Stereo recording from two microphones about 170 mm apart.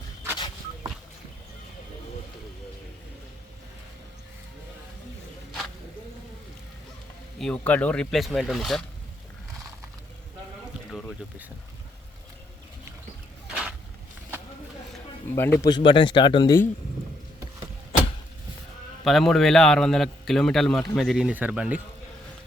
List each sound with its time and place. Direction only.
7.3 s a man's voice: 5° left (ahead or behind)
13.5 s a sound: 5° right (ahead or behind)
15.3 s speech: 15° left (ahead or behind)
15.7 s speech: 30° left (ahead or behind)
19.0 s a man's voice: centre (ahead or behind)